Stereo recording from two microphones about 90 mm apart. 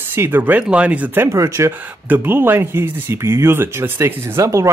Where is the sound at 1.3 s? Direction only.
35° right (ahead or behind).